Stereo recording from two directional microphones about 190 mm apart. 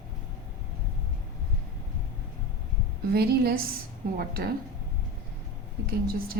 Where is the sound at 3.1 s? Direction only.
55° right (ahead or behind).